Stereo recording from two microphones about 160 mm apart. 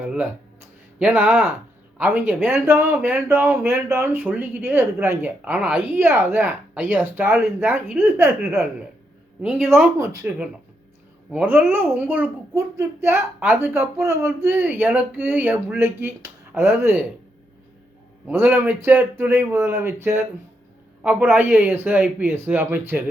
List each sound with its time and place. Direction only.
0.1 s speech: 10° right (ahead or behind)
11.7 s speech: 15° right (ahead or behind)
18.3 s speech: 10° right (ahead or behind)